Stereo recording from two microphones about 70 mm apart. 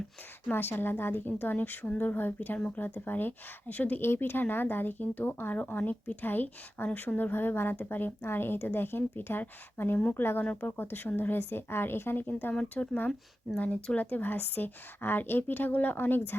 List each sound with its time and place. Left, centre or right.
0.5 s speech: left
4.0 s a woman's voice: left